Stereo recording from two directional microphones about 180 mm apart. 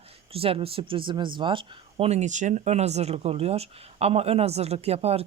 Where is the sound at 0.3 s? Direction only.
30° right (ahead or behind).